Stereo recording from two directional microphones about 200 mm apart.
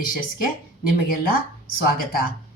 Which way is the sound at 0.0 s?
45° left (ahead or behind).